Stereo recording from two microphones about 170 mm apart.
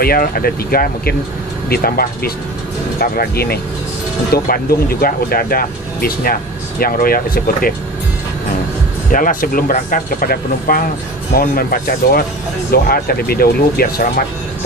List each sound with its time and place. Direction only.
0.0 s speech: 60° left (ahead or behind)
9.1 s speech: 55° left (ahead or behind)